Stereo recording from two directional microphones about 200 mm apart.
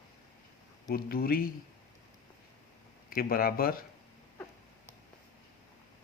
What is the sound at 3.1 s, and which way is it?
Speech, 45° left (ahead or behind).